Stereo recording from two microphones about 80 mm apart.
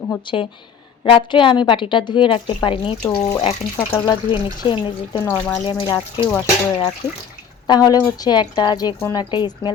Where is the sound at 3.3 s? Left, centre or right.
Left.